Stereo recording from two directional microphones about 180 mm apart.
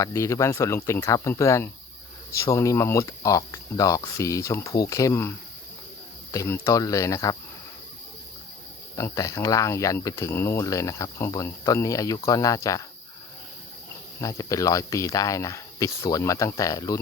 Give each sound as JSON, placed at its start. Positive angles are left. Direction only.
{"t": 0.0, "sound": "speech", "side_deg": 15}
{"t": 6.3, "sound": "speech", "side_deg": 15}
{"t": 9.0, "sound": "speech", "side_deg": 15}
{"t": 14.2, "sound": "speech", "side_deg": 20}